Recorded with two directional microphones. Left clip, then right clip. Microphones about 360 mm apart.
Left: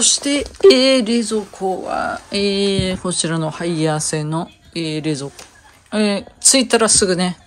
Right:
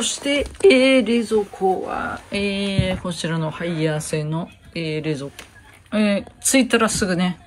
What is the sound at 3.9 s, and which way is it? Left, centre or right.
Speech, left.